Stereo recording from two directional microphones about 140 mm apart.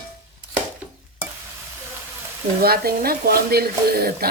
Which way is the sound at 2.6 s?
90° right.